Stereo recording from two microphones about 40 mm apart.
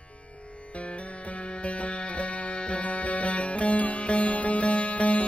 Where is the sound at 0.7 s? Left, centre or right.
Left.